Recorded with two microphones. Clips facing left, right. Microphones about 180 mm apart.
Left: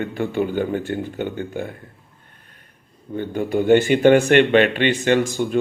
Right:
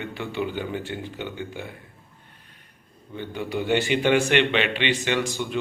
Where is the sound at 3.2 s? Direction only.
50° left (ahead or behind).